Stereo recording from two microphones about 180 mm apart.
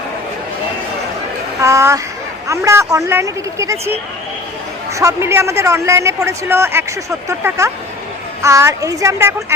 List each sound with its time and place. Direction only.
1.6 s speech: 15° right (ahead or behind)